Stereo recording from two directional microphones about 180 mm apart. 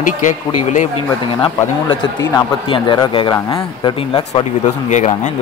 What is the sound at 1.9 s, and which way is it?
A man's voice, 25° left (ahead or behind).